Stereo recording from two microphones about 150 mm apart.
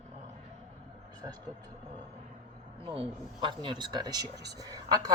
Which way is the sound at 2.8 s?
35° right (ahead or behind).